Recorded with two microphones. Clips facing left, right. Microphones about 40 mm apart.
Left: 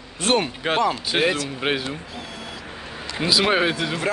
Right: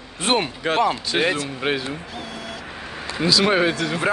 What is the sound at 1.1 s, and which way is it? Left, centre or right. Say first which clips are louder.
Speech: even; centre.